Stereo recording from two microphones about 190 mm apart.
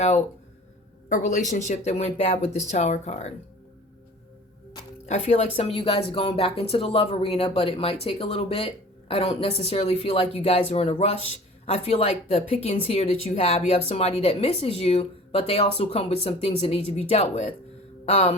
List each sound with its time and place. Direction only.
1.1 s a woman's voice: 40° left (ahead or behind)
5.0 s a woman's voice: 35° left (ahead or behind)
18.0 s mantra: 35° left (ahead or behind)